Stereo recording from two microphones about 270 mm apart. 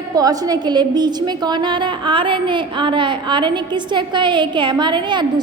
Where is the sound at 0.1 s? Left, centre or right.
Centre.